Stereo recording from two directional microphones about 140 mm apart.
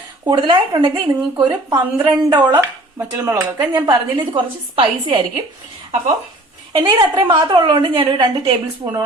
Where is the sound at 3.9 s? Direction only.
35° right (ahead or behind).